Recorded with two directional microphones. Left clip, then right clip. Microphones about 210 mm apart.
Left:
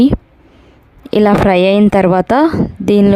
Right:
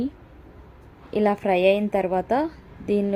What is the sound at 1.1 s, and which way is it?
A woman's voice, 55° left (ahead or behind).